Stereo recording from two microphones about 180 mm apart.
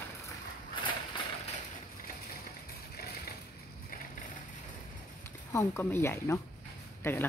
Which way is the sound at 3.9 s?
50° left (ahead or behind).